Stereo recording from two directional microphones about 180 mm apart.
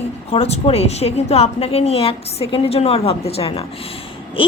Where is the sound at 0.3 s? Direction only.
35° left (ahead or behind).